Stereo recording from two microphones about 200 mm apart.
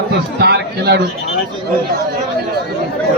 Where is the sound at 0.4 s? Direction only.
55° right (ahead or behind).